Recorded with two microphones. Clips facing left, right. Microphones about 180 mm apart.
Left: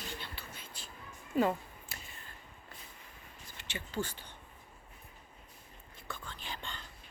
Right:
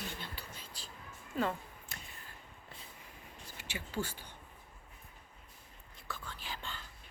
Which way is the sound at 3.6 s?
10° right (ahead or behind).